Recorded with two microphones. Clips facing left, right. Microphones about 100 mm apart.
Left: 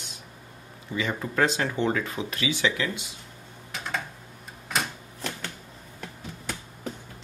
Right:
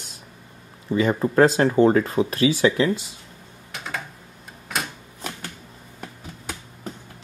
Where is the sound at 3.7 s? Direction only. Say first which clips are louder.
Even; centre (ahead or behind).